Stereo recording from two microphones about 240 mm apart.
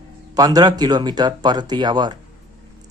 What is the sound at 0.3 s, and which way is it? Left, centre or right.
Speech, centre.